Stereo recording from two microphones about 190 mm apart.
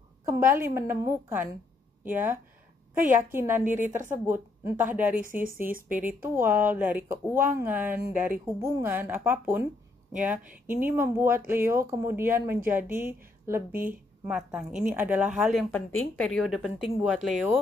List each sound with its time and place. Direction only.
0.2 s a sound: 15° right (ahead or behind)
0.6 s a woman's voice: 15° right (ahead or behind)
5.2 s speech: 45° right (ahead or behind)
5.9 s a woman's voice: 10° right (ahead or behind)